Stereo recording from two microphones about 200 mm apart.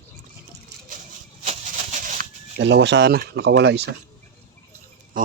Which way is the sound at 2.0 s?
40° right (ahead or behind).